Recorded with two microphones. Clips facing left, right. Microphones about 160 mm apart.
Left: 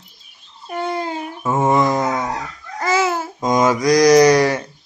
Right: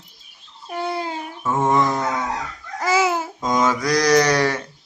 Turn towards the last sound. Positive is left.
turn(degrees=15)  # may be behind; listen again after turning